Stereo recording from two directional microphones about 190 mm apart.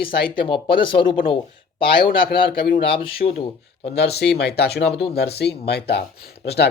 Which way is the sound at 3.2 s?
40° left (ahead or behind).